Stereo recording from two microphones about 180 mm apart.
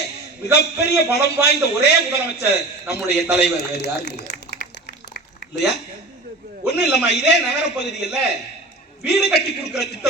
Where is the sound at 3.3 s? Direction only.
70° left (ahead or behind).